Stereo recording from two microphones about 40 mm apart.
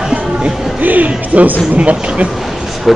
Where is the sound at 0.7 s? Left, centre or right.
Right.